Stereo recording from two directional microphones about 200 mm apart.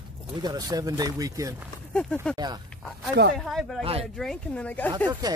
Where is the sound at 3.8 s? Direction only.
30° right (ahead or behind).